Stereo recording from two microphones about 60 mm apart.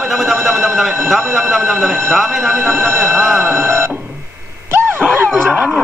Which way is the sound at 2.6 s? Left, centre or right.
Right.